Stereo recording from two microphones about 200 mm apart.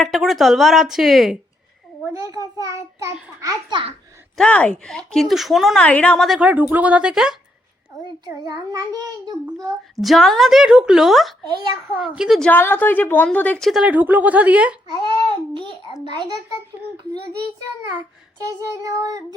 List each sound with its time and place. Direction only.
0.0 s speech: centre (ahead or behind)
2.1 s a child's voice: 15° right (ahead or behind)
4.4 s speech: 5° left (ahead or behind)
8.0 s a child's voice: 20° right (ahead or behind)
9.9 s speech: centre (ahead or behind)
12.5 s speech: 10° left (ahead or behind); by 14.8 s 5° right (ahead or behind)
16.1 s a child's voice: 20° right (ahead or behind)
18.4 s a child's voice: 15° right (ahead or behind)